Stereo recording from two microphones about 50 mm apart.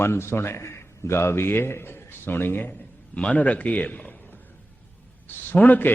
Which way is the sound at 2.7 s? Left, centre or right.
Left.